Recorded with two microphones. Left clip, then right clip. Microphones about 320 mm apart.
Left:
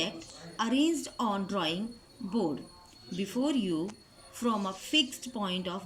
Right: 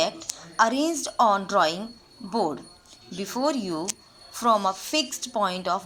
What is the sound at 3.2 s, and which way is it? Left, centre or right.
A woman's voice, centre.